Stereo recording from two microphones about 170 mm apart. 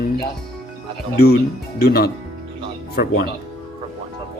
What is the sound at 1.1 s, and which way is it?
Speech, 70° left (ahead or behind).